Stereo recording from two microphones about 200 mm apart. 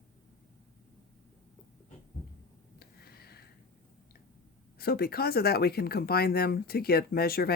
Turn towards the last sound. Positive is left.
turn(degrees=50)  # may be behind; listen again after turning